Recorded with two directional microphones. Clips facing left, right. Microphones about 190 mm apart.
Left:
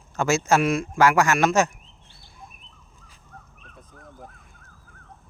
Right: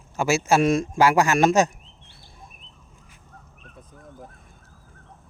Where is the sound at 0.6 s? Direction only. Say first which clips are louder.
Right 3 dB; 25° right (ahead or behind).